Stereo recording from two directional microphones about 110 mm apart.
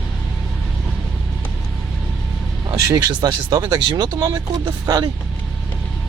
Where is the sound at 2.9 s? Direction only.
40° right (ahead or behind).